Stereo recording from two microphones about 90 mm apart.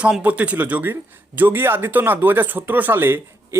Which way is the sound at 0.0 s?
15° right (ahead or behind).